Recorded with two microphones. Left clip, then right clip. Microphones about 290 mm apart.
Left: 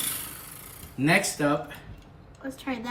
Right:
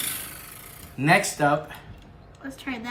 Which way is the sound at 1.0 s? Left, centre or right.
Centre.